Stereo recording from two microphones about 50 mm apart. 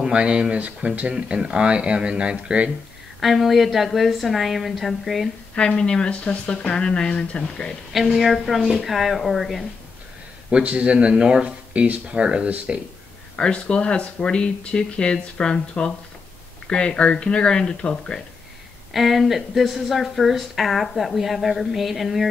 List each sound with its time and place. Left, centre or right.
0.0 s speech: centre
3.2 s a woman's voice: centre
5.5 s speech: centre
7.9 s a woman's voice: centre
10.5 s speech: right
13.4 s speech: left
18.9 s a woman's voice: centre